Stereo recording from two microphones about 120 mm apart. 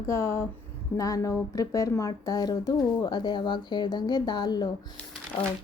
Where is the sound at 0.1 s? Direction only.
25° left (ahead or behind).